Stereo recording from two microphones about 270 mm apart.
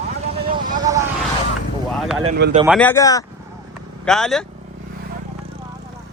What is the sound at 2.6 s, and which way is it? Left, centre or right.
Speech, centre.